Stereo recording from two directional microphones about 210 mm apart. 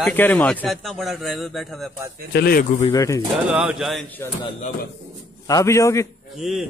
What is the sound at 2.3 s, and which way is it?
Speech, 50° left (ahead or behind).